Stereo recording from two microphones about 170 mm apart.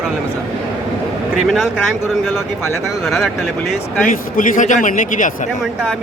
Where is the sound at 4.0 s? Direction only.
50° left (ahead or behind).